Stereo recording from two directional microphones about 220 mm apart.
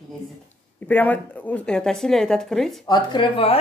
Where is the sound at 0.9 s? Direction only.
5° left (ahead or behind).